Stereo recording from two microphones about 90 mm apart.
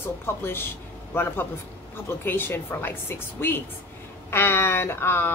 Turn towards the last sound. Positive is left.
turn(degrees=25)  # may be behind; listen again after turning